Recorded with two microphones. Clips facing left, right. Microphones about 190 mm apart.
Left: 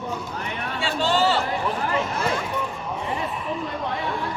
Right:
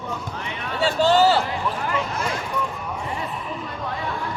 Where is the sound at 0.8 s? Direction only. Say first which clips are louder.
Right 5 dB; 40° right (ahead or behind).